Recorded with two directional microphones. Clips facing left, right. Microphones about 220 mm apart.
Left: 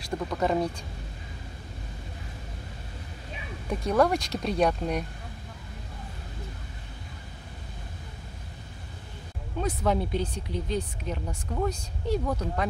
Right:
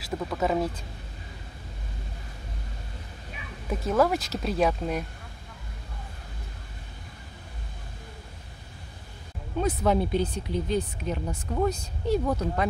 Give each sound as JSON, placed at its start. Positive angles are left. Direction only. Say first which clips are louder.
{"t": 0.0, "sound": "speech", "louder": "even", "side_deg": 0}
{"t": 3.6, "sound": "speech", "louder": "even", "side_deg": 0}
{"t": 9.6, "sound": "speech", "louder": "right 3 dB", "side_deg": -5}